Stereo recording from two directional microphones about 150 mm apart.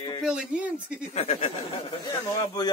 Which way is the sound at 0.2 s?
5° right (ahead or behind).